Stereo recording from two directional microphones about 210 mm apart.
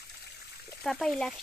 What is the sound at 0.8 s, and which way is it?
Speech, centre (ahead or behind).